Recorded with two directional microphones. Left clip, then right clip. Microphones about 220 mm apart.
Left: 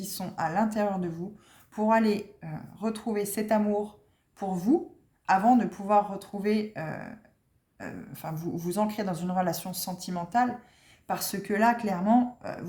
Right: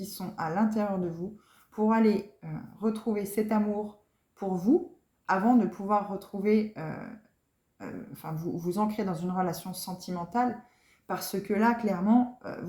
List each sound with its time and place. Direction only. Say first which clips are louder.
0.0 s speech: left 3 dB; 50° left (ahead or behind)